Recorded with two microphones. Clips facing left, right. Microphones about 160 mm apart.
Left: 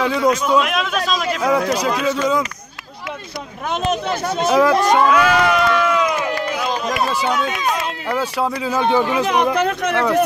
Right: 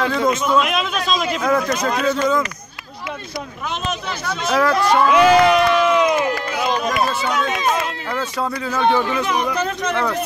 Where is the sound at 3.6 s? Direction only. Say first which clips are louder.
Left 6 dB; 55° left (ahead or behind).